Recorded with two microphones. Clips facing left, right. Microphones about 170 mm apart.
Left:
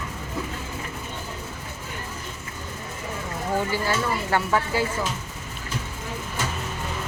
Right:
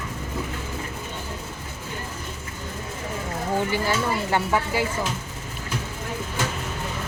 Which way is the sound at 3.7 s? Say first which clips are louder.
Right 1 dB; 15° right (ahead or behind).